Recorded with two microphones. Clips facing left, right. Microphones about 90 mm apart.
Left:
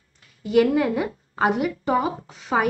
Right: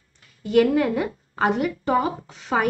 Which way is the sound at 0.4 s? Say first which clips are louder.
Even; 5° left (ahead or behind).